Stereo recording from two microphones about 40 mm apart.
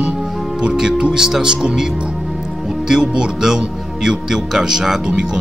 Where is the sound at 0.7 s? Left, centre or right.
Right.